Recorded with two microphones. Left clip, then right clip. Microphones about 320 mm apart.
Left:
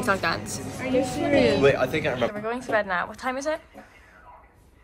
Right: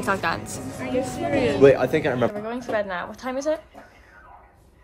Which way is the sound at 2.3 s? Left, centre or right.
Centre.